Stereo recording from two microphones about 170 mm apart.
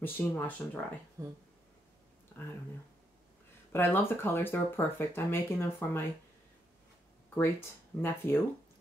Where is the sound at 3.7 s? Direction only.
15° left (ahead or behind).